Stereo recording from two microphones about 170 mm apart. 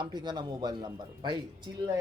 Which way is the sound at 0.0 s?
25° right (ahead or behind).